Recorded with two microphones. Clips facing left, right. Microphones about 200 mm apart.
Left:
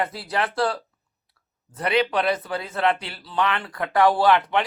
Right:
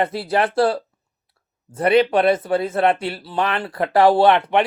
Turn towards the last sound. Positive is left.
turn(degrees=-25)  # may be behind; listen again after turning